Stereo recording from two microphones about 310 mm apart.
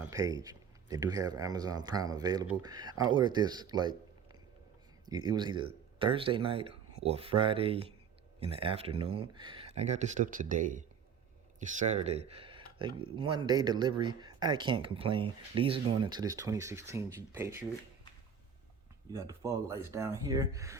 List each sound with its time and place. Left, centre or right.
0.0 s speech: centre
19.1 s speech: centre